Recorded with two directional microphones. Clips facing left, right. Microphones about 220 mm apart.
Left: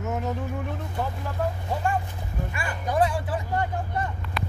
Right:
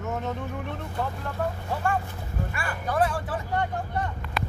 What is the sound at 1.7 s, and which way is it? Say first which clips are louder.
Speech: left 1 dB; 15° left (ahead or behind).